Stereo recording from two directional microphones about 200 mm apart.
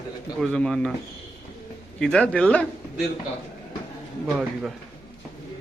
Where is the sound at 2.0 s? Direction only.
5° left (ahead or behind).